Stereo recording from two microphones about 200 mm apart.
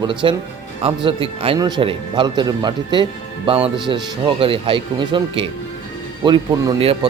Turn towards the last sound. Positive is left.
turn(degrees=-30)  # may be behind; listen again after turning